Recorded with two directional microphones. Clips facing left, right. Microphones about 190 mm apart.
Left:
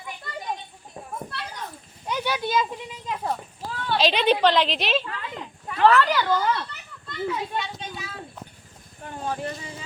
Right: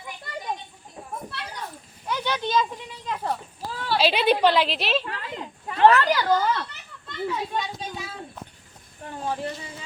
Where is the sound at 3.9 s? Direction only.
5° right (ahead or behind).